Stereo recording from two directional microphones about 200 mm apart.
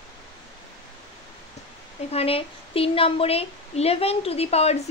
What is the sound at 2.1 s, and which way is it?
A woman's voice, 30° left (ahead or behind).